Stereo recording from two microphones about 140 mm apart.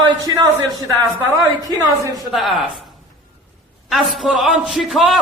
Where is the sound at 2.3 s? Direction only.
Centre (ahead or behind).